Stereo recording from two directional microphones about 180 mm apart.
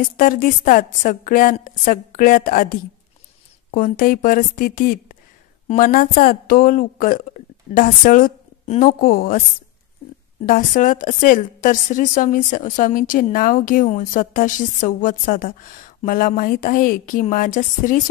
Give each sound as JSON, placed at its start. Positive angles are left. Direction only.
{"t": 0.0, "sound": "a woman's voice", "side_deg": 50}
{"t": 8.8, "sound": "a woman's voice", "side_deg": 55}
{"t": 10.4, "sound": "a woman's voice", "side_deg": 50}